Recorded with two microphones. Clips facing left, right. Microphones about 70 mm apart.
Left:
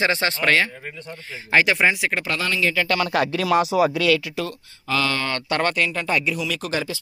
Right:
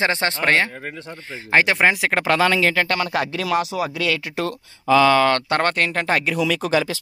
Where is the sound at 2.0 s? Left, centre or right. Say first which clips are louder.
Right 6 dB; right.